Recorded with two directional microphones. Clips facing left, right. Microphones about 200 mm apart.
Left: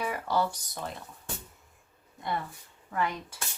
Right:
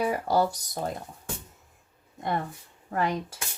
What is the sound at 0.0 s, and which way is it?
Speech, 40° right (ahead or behind).